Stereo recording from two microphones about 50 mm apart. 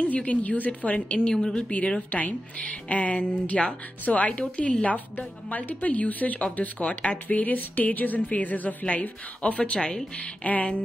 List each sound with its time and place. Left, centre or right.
0.1 s speech: left
1.5 s speech: left
4.9 s speech: left